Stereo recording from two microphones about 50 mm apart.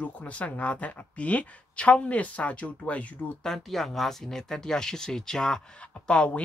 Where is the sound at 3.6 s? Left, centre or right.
Centre.